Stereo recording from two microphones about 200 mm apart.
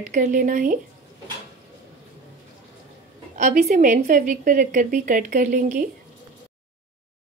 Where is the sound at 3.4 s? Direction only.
45° right (ahead or behind).